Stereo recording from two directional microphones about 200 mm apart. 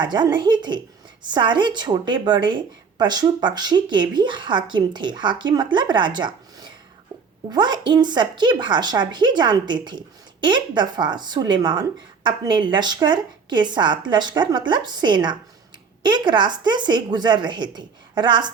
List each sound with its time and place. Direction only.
0.0 s speech: 20° right (ahead or behind)